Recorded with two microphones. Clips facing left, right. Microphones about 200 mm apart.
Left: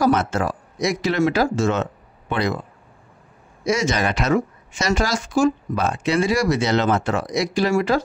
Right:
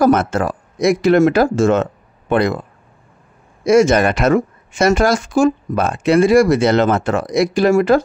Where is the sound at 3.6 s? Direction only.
55° right (ahead or behind).